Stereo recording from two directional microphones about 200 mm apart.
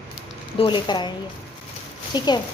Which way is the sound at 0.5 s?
25° left (ahead or behind).